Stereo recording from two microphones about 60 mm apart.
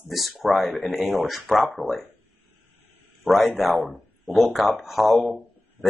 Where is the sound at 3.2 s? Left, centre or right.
Centre.